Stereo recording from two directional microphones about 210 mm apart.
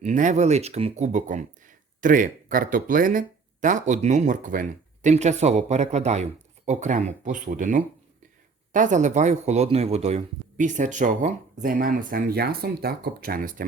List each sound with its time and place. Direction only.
0.0 s speech: 35° right (ahead or behind)